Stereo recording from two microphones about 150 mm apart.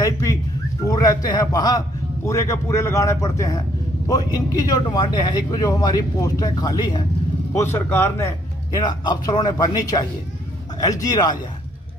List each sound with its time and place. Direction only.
0.0 s bird: 20° left (ahead or behind)
0.8 s a man's voice: 25° left (ahead or behind)
7.5 s speech: 15° left (ahead or behind)
8.8 s speech: 25° left (ahead or behind)